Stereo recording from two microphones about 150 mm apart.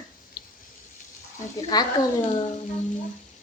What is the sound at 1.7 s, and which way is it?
Speech, 25° left (ahead or behind).